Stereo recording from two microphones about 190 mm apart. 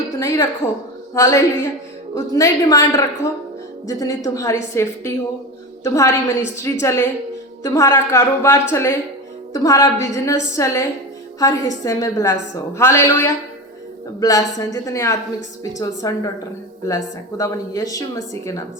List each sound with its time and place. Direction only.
0.2 s a woman's voice: 15° left (ahead or behind)